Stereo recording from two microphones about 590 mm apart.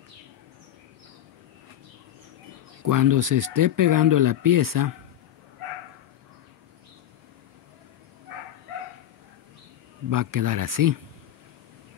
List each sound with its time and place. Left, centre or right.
2.8 s speech: right
10.0 s speech: right